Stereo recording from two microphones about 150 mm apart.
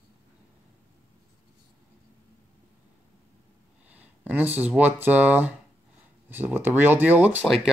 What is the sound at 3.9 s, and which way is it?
Speech, 10° right (ahead or behind).